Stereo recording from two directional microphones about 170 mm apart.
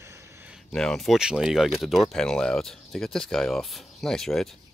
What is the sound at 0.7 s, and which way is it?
Speech, 5° left (ahead or behind).